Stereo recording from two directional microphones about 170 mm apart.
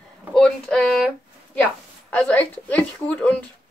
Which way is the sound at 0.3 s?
5° left (ahead or behind).